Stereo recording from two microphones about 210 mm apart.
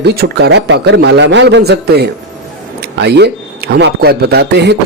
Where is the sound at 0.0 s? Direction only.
50° right (ahead or behind).